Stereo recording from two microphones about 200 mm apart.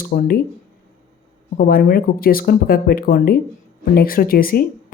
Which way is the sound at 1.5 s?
45° left (ahead or behind).